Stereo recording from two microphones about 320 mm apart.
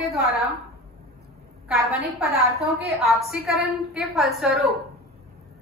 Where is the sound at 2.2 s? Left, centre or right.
Centre.